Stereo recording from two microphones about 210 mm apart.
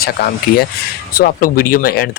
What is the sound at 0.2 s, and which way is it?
Speech, 50° left (ahead or behind).